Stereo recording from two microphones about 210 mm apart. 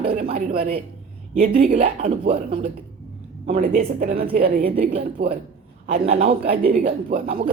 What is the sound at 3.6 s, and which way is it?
A woman's voice, 40° right (ahead or behind).